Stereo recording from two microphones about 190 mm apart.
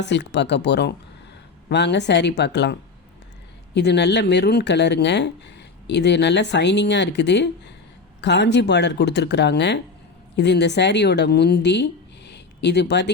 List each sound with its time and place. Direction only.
0.0 s speech: 65° left (ahead or behind)
3.8 s speech: 65° left (ahead or behind)